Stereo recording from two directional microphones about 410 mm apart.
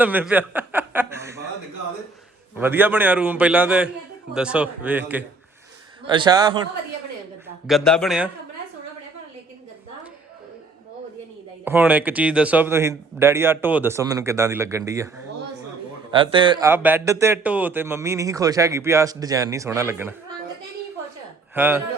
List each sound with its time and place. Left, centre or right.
0.0 s chuckle: centre
2.6 s speech: centre
7.7 s speech: centre
11.6 s speech: centre
16.1 s speech: centre
21.5 s speech: centre